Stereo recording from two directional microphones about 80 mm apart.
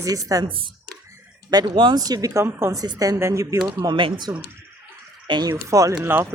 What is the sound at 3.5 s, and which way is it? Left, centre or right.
Speech, right.